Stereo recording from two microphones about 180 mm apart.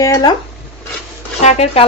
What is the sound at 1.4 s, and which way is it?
Speech, 35° left (ahead or behind).